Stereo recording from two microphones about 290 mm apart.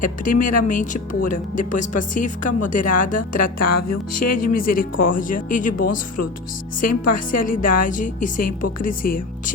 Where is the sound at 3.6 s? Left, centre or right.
Left.